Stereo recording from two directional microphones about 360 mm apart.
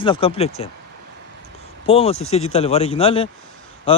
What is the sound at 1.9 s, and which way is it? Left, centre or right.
Speech, centre.